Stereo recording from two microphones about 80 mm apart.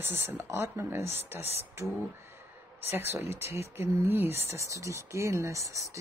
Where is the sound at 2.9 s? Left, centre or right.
Right.